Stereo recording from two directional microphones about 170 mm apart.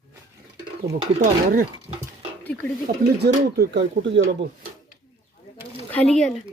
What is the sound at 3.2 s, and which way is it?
Speech, 80° right.